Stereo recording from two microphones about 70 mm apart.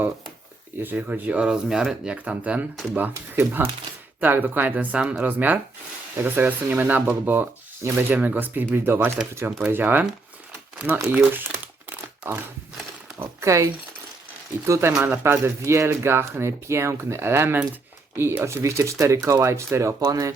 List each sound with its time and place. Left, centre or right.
0.8 s speech: right
1.4 s speech: centre
2.1 s speech: right
11.1 s speech: right
12.2 s speech: right
13.4 s speech: right
14.7 s speech: right
20.0 s speech: right